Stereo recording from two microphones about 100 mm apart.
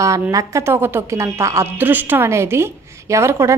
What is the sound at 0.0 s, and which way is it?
Speech, 30° right (ahead or behind).